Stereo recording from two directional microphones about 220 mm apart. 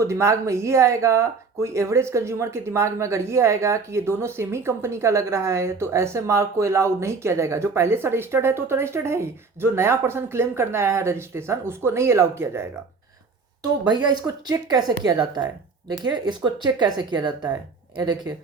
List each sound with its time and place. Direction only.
0.0 s speech: 15° right (ahead or behind)
13.8 s speech: 20° right (ahead or behind)